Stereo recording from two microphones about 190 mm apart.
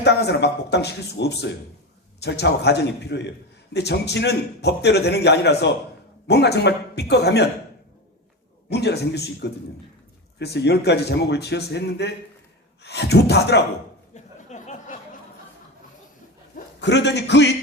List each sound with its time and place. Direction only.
0.0 s a man's voice: 60° left (ahead or behind)
8.7 s a man's voice: 60° left (ahead or behind)
14.1 s a sound: 40° left (ahead or behind)
16.8 s a man's voice: 65° left (ahead or behind)